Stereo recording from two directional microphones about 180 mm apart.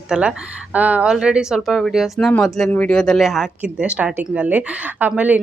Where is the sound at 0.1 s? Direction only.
5° right (ahead or behind).